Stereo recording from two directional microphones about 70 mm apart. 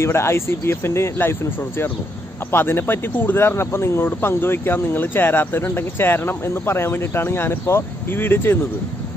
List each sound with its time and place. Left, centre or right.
0.0 s speech: left